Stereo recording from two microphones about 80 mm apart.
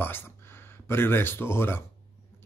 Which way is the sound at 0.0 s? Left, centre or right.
Left.